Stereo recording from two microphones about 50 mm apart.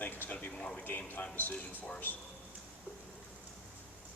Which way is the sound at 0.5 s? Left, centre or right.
Centre.